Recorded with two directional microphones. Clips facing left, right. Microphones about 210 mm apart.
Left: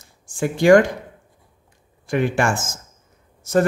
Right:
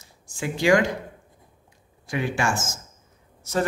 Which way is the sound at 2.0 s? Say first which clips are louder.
Left 6 dB; 55° left (ahead or behind).